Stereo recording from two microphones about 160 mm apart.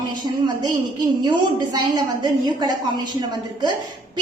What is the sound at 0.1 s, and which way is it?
A woman's voice, 25° right (ahead or behind).